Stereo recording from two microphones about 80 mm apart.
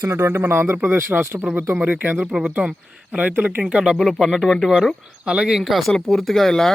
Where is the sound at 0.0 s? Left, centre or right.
Right; by 4.7 s centre.